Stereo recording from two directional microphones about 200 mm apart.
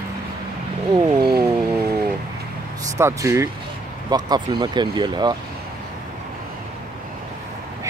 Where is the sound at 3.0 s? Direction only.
15° right (ahead or behind).